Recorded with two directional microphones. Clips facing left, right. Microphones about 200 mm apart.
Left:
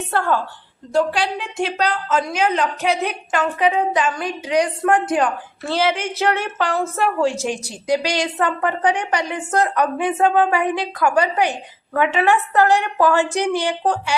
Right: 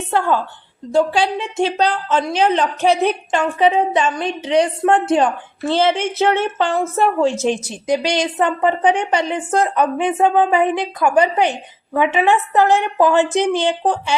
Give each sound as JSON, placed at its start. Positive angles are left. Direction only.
{"t": 0.1, "sound": "a woman's voice", "side_deg": -15}
{"t": 0.9, "sound": "a woman's voice", "side_deg": -25}